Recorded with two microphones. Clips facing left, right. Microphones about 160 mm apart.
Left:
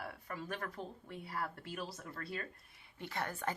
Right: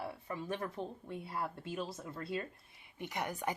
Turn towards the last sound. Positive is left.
turn(degrees=-15)  # may be behind; listen again after turning